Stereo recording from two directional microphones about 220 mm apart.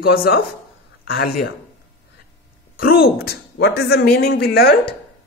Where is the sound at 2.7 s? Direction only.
45° left (ahead or behind).